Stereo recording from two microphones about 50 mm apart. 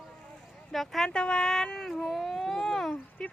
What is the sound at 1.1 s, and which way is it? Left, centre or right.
Speech, centre.